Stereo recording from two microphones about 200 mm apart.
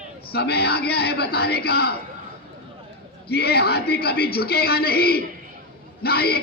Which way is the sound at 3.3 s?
55° left (ahead or behind).